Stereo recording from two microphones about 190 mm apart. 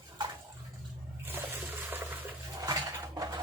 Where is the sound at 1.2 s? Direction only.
10° right (ahead or behind).